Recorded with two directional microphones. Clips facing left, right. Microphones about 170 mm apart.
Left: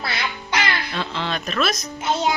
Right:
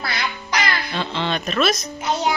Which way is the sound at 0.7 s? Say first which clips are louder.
Right 1 dB; centre (ahead or behind).